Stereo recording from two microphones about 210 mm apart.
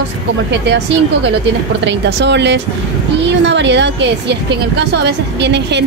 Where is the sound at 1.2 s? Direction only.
55° right (ahead or behind).